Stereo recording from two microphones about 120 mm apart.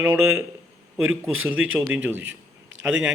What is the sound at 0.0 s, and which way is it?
Speech, 20° right (ahead or behind).